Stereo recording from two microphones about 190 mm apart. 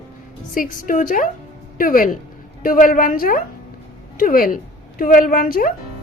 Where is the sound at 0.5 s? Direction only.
45° left (ahead or behind).